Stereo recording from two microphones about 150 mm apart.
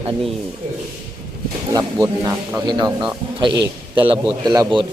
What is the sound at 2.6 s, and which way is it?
A man's voice, 30° right (ahead or behind).